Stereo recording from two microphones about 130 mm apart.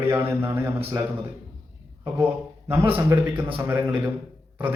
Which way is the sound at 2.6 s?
20° right (ahead or behind).